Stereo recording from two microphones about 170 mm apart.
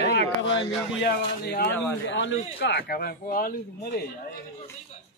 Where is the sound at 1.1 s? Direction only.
65° left (ahead or behind).